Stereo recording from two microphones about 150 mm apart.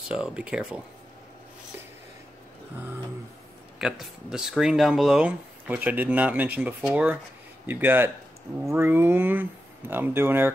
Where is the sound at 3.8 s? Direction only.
5° right (ahead or behind).